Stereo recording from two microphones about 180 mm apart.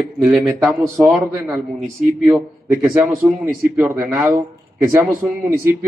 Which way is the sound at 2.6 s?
15° right (ahead or behind).